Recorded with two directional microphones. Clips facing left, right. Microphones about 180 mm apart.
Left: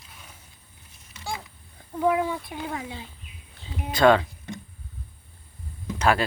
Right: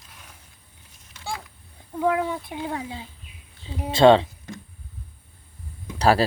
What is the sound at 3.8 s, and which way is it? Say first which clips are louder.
Speech: right 4 dB; 30° right (ahead or behind).